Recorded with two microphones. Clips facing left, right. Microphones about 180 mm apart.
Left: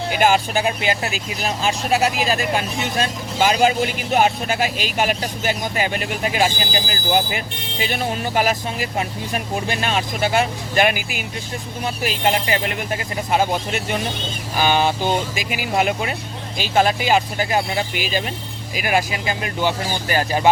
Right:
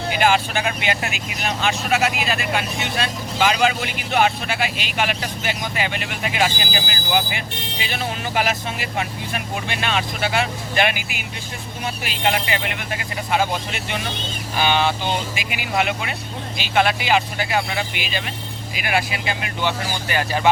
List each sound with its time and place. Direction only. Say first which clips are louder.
0.2 s speech: left 2 dB; 40° left (ahead or behind)